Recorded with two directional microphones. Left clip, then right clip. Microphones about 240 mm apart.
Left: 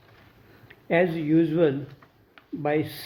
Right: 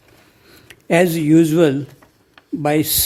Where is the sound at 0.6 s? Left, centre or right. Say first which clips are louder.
Right 7 dB; right.